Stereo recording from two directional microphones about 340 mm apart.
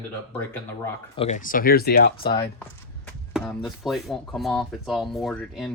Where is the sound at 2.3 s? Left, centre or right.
Centre.